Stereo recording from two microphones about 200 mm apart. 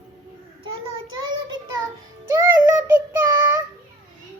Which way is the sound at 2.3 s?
10° right (ahead or behind).